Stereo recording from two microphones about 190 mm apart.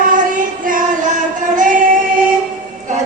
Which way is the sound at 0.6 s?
45° right (ahead or behind).